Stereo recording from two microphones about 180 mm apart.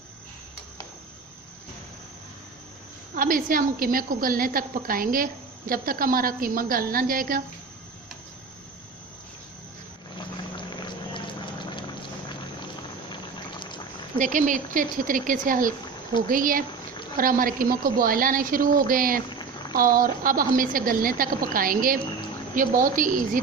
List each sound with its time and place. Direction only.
3.2 s a woman's voice: 50° right (ahead or behind)
10.5 s boiling: 25° left (ahead or behind)
13.6 s a sound: 25° left (ahead or behind)
14.2 s a woman's voice: 45° right (ahead or behind)
19.3 s a sound: 25° left (ahead or behind)
19.7 s a woman's voice: 50° right (ahead or behind)